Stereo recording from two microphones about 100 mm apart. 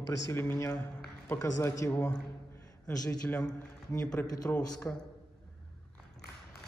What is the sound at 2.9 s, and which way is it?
Speech, 40° left (ahead or behind).